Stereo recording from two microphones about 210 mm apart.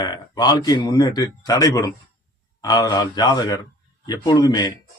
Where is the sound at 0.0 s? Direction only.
20° left (ahead or behind).